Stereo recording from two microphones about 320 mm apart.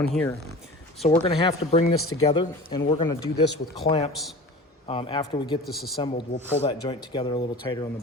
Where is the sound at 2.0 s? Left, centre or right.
Left.